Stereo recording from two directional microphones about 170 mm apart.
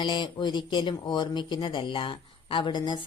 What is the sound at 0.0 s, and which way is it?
Speech, 25° left (ahead or behind).